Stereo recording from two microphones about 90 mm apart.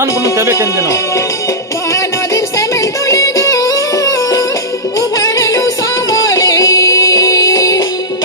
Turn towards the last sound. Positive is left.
turn(degrees=40)  # may be behind; listen again after turning